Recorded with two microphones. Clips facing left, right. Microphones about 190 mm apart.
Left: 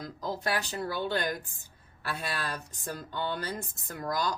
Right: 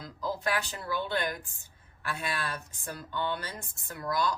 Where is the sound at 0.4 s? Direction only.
40° left (ahead or behind).